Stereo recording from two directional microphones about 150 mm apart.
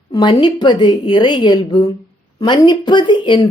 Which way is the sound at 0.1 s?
30° left (ahead or behind).